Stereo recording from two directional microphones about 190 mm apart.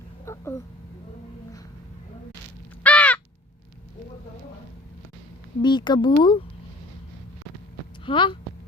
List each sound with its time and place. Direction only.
0.3 s a sound: 15° left (ahead or behind)
2.8 s crow: 5° left (ahead or behind)
5.6 s speech: 25° left (ahead or behind)
8.0 s speech: 25° left (ahead or behind)